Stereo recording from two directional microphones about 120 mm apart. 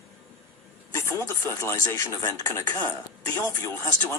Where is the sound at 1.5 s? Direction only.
20° left (ahead or behind).